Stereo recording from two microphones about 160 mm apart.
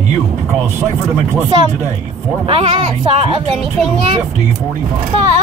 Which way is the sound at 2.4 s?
35° right (ahead or behind).